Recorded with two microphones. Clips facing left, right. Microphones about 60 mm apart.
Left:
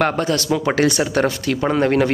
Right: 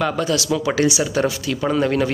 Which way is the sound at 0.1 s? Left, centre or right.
Left.